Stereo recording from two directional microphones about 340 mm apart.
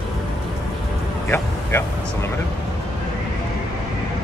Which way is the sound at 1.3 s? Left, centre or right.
Centre.